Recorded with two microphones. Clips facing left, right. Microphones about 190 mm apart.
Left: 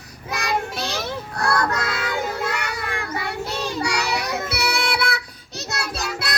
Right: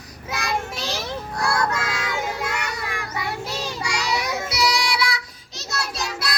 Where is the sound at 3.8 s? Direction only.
60° left (ahead or behind).